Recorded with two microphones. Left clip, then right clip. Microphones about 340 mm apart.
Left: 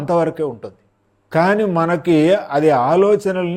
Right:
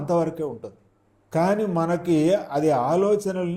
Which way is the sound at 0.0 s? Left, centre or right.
Left.